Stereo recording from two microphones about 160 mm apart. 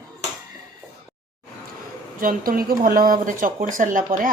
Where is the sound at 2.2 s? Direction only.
60° right (ahead or behind).